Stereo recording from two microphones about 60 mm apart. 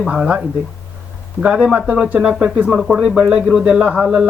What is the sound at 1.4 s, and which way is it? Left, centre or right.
Speech, right.